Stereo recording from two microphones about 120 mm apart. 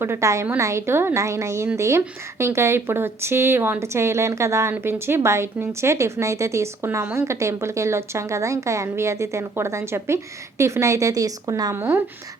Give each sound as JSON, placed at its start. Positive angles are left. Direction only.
{"t": 0.0, "sound": "a woman's voice", "side_deg": -25}
{"t": 11.8, "sound": "speech", "side_deg": -15}